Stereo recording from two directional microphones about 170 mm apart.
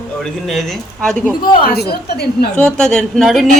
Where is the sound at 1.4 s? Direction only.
60° left (ahead or behind).